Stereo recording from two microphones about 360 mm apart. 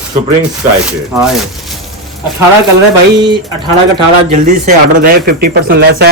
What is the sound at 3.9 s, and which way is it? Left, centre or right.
Speech, centre.